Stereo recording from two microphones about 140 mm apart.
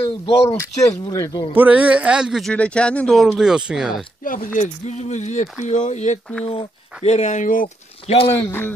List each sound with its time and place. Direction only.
0.0 s speech: 40° left (ahead or behind)
1.0 s speech: 25° left (ahead or behind)
1.5 s speech: 10° right (ahead or behind)
2.5 s speech: 10° left (ahead or behind)
4.2 s speech: 75° left (ahead or behind)
4.6 s speech: 55° left (ahead or behind)
6.4 s speech: 45° left (ahead or behind); by 7.6 s 65° left (ahead or behind)
8.3 s speech: 15° left (ahead or behind)